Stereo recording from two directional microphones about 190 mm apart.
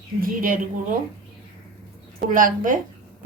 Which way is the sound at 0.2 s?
45° right (ahead or behind).